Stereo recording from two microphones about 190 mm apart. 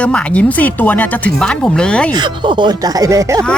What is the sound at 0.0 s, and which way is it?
Speech, 5° left (ahead or behind).